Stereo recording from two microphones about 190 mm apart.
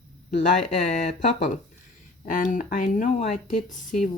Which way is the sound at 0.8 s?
40° left (ahead or behind).